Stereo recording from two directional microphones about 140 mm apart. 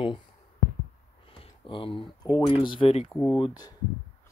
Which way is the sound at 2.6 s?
35° left (ahead or behind).